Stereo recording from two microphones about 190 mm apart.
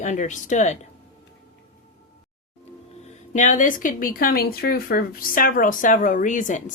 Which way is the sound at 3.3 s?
40° left (ahead or behind).